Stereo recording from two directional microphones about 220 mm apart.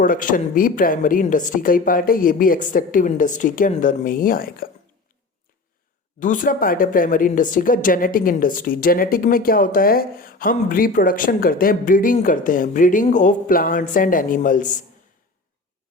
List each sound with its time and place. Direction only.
0.0 s speech: 35° left (ahead or behind)
6.1 s speech: 35° left (ahead or behind)